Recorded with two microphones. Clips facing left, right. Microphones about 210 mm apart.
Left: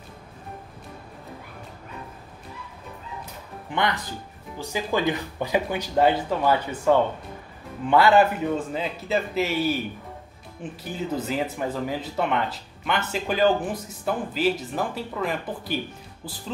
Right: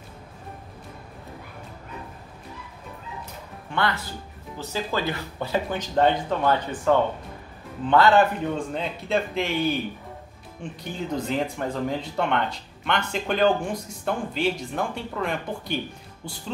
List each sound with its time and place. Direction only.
3.7 s speech: 15° left (ahead or behind)